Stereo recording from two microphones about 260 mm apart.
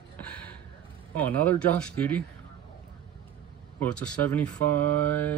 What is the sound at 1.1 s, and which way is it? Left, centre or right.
Speech, centre.